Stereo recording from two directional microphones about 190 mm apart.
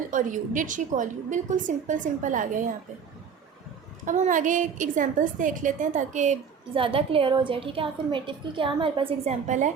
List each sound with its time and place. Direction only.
0.1 s a woman's voice: 45° right (ahead or behind)
4.0 s a woman's voice: 40° right (ahead or behind)